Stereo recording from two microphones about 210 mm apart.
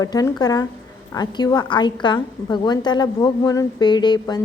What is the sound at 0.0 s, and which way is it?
A woman's voice, 15° left (ahead or behind).